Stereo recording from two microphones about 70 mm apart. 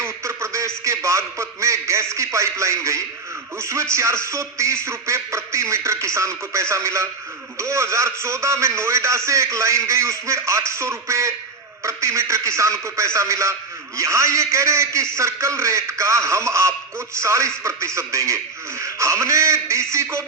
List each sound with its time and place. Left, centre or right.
0.0 s a man's voice: right